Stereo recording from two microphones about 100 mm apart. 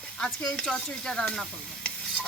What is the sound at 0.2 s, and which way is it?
Speech, 5° left (ahead or behind).